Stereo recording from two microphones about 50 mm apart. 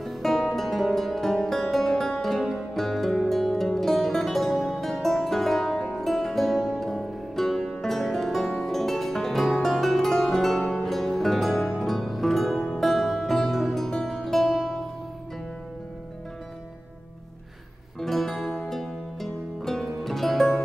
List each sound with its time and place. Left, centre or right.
0.0 s music: centre
12.5 s music: centre
12.8 s music: centre
18.0 s music: centre